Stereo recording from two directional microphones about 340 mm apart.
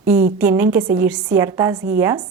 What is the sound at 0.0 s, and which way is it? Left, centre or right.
A woman's voice, centre.